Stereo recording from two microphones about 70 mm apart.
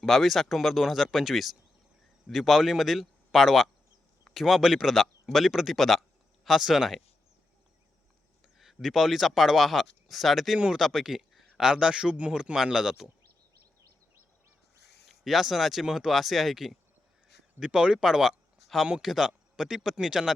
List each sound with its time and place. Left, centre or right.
0.0 s speech: centre
8.5 s speech: centre
15.0 s speech: centre